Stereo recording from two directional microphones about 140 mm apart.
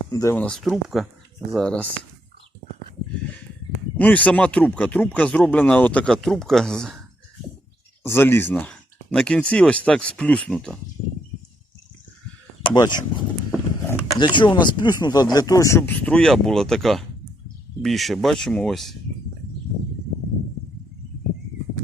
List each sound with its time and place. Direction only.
0.1 s speech: 25° left (ahead or behind)
0.3 s speech: 5° left (ahead or behind)
3.9 s speech: 10° left (ahead or behind)
8.0 s speech: 15° left (ahead or behind)
12.6 s speech: 30° left (ahead or behind)
13.5 s a sound: 20° left (ahead or behind)
14.2 s speech: 35° left (ahead or behind)
15.9 s speech: 5° left (ahead or behind)